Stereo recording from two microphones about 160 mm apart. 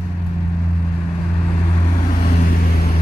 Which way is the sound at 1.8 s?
50° left (ahead or behind).